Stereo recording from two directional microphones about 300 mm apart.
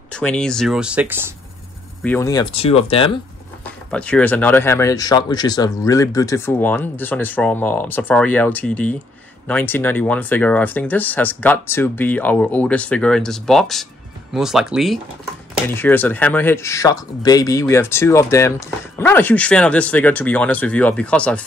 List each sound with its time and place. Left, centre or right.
0.1 s speech: centre
2.0 s speech: centre
3.6 s speech: centre